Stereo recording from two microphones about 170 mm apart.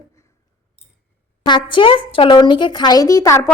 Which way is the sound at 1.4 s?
30° left (ahead or behind).